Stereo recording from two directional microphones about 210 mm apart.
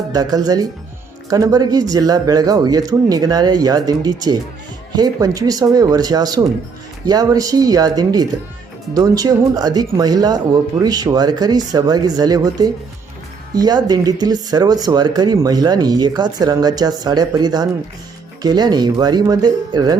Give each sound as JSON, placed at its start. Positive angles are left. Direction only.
{"t": 0.1, "sound": "speech", "side_deg": -15}